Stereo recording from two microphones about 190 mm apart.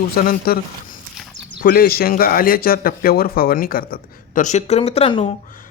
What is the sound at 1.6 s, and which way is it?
A man's voice, 50° left (ahead or behind).